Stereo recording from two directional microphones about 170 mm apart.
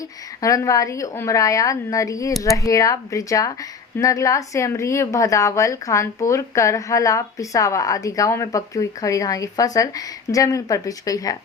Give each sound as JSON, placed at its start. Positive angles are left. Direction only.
{"t": 0.4, "sound": "a woman's voice", "side_deg": 20}